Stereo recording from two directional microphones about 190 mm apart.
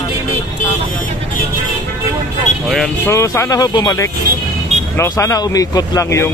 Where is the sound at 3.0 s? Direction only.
15° left (ahead or behind).